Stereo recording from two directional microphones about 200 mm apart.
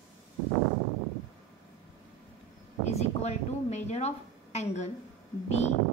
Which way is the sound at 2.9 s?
35° left (ahead or behind).